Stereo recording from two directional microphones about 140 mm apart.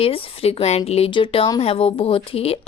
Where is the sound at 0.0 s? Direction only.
40° left (ahead or behind).